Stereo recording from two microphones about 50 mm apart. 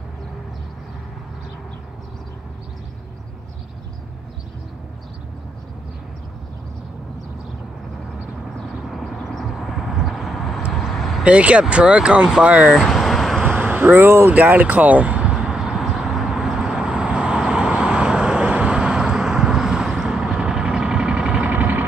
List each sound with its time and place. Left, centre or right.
8.8 s vehicle: centre
11.2 s speech: right
12.7 s vehicle: centre
13.4 s vehicle: right
14.0 s speech: right
14.3 s a sound: right; by 15.8 s centre
16.0 s vehicle: centre
21.5 s vehicle: right